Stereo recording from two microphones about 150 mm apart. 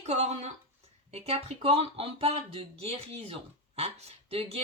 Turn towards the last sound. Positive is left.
turn(degrees=-40)  # may be behind; listen again after turning